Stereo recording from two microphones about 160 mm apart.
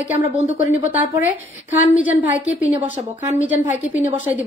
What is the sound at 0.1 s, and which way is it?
A woman's voice, 10° right (ahead or behind).